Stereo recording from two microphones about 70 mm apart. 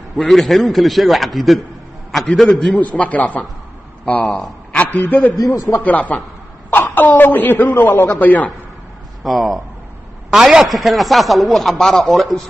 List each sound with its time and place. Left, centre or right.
0.2 s a man's voice: centre
2.7 s a man's voice: centre
5.4 s speech: left
5.8 s a man's voice: left
9.2 s a man's voice: centre